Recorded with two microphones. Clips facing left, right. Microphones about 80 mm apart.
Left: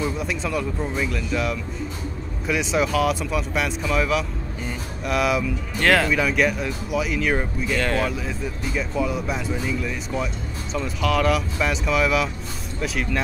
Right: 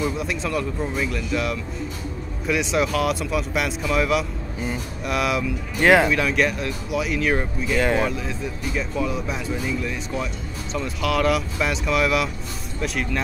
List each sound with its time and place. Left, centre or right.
0.0 s speech: centre
5.8 s speech: centre
6.1 s speech: centre
7.8 s speech: centre
8.1 s speech: centre